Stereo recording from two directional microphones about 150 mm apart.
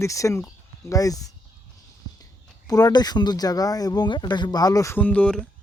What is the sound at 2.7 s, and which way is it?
Speech, 25° left (ahead or behind).